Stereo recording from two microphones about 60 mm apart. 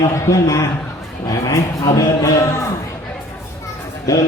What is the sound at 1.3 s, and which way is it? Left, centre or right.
Speech, left.